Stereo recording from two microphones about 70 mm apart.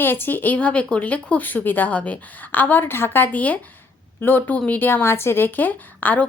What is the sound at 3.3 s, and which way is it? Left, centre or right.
Speech, left.